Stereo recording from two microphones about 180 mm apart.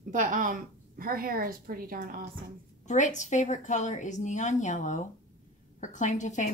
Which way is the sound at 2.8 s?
40° left (ahead or behind).